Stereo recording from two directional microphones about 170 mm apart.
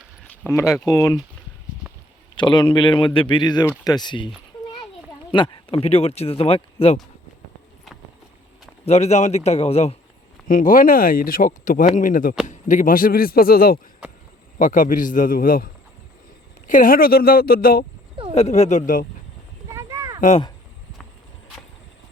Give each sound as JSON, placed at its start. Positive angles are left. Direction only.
{"t": 0.4, "sound": "speech", "side_deg": 15}
{"t": 2.3, "sound": "speech", "side_deg": 25}
{"t": 5.3, "sound": "speech", "side_deg": 30}
{"t": 8.8, "sound": "speech", "side_deg": 40}
{"t": 10.5, "sound": "a man's voice", "side_deg": 55}
{"t": 18.3, "sound": "speech", "side_deg": 40}
{"t": 19.7, "sound": "a sound", "side_deg": -20}